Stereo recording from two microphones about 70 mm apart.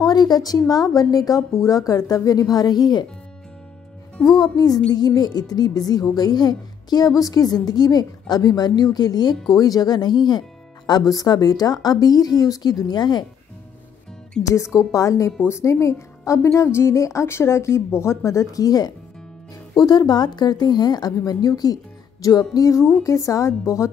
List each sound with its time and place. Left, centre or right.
0.0 s speech: left
0.6 s speech: left
4.3 s speech: left
7.2 s speech: left
9.6 s speech: left
10.9 s speech: left
14.5 s a woman's voice: left